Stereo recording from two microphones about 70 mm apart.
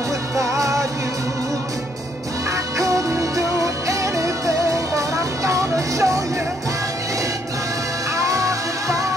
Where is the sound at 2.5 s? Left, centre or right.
Right.